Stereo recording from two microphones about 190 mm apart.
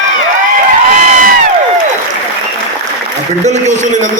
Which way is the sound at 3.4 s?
35° right (ahead or behind).